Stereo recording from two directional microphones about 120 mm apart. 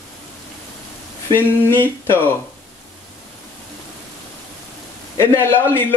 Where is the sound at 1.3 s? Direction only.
20° left (ahead or behind).